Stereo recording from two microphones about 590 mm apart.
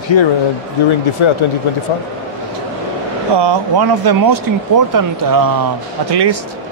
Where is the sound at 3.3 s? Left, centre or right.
Right.